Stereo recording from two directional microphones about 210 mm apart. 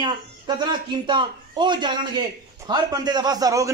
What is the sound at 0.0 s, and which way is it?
A man's voice, 20° right (ahead or behind).